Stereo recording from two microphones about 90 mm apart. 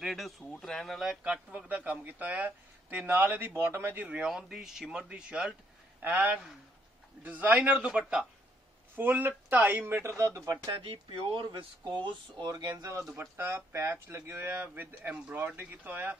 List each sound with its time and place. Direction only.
0.0 s speech: centre (ahead or behind); by 4.1 s 20° right (ahead or behind)
4.1 s speech: 10° right (ahead or behind)
8.9 s speech: 20° right (ahead or behind); by 10.6 s 40° right (ahead or behind)
10.8 s speech: 80° right; by 12.4 s 65° right (ahead or behind)
12.4 s speech: 45° right (ahead or behind)
13.1 s speech: 25° right (ahead or behind)